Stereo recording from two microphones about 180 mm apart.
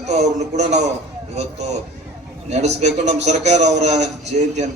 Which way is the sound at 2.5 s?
40° right (ahead or behind).